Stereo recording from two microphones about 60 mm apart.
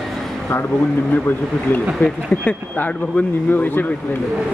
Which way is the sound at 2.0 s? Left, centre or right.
Left.